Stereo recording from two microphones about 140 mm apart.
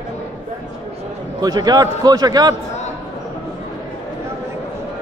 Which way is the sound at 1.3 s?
30° right (ahead or behind).